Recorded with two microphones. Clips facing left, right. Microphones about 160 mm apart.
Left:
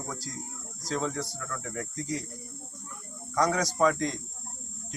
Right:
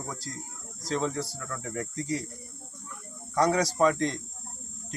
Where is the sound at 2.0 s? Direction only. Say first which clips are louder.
Right 2 dB; 5° right (ahead or behind).